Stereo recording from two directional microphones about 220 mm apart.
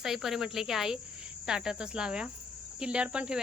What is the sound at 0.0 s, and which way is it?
Cricket, centre (ahead or behind).